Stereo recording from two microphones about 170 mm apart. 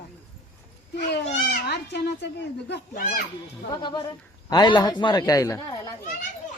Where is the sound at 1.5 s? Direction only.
85° left.